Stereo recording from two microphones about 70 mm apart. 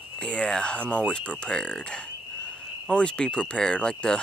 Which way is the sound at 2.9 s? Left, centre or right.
Centre.